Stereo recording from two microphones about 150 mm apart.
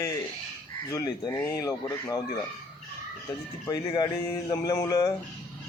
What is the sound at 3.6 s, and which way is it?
Speech, 30° left (ahead or behind).